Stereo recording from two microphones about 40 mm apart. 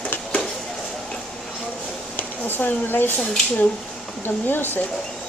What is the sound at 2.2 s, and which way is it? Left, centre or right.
Speech, left.